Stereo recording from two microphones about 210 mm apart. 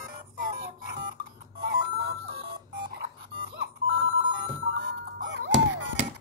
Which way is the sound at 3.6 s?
60° right (ahead or behind).